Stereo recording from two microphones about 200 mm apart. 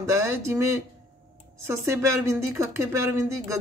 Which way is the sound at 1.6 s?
15° right (ahead or behind).